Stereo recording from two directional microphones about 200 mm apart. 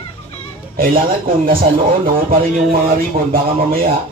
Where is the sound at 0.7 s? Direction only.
45° right (ahead or behind).